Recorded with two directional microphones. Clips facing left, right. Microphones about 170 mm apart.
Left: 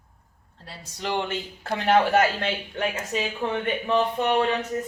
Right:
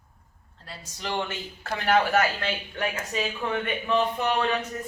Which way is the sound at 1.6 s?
25° left (ahead or behind).